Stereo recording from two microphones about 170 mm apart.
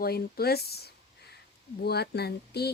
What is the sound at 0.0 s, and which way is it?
Speech, 65° left (ahead or behind).